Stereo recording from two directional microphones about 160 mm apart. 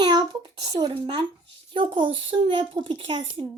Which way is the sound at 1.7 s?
30° right (ahead or behind).